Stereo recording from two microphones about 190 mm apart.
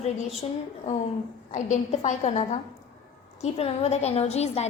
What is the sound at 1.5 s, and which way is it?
A woman's voice, 40° left (ahead or behind).